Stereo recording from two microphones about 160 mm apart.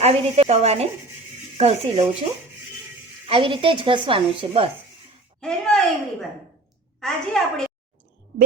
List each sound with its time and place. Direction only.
0.0 s speech: 40° right (ahead or behind)
3.2 s speech: 35° right (ahead or behind)
5.4 s a woman's voice: 5° left (ahead or behind)